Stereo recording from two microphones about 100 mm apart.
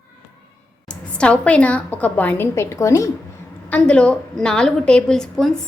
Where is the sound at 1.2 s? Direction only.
10° left (ahead or behind).